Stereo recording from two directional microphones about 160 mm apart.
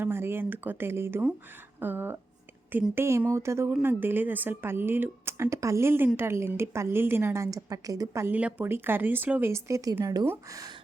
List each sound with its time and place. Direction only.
0.0 s a woman's voice: 15° right (ahead or behind)